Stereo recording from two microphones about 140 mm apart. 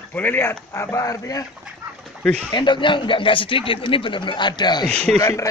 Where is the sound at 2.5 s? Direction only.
35° left (ahead or behind).